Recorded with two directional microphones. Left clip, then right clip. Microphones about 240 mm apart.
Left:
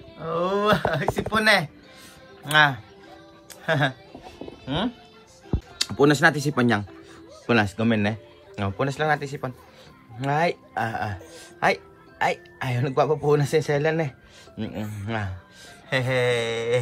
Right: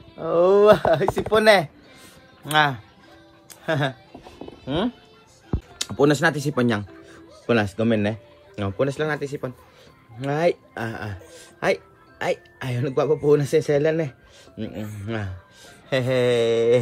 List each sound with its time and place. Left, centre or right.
0.2 s a man's voice: right